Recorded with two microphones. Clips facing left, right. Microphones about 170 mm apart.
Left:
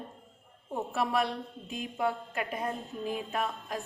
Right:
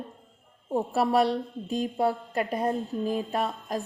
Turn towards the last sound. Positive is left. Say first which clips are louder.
# right 4 dB
turn(degrees=-35)  # may be behind; listen again after turning